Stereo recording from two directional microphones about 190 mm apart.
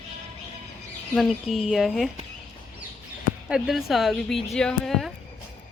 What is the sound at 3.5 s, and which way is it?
A woman's voice, centre (ahead or behind).